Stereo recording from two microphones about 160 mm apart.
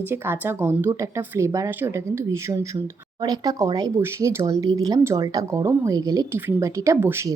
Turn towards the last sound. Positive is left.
turn(degrees=-15)  # may be behind; listen again after turning